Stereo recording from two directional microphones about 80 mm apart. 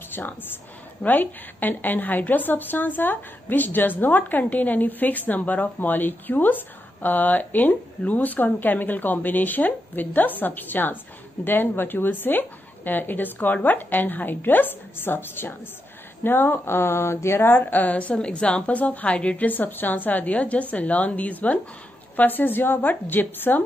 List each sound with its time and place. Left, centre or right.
0.1 s a woman's voice: left